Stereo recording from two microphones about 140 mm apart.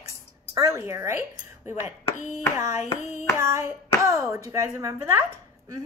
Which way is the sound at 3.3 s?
20° right (ahead or behind).